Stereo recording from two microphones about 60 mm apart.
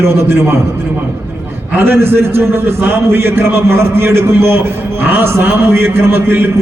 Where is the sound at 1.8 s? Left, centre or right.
Right.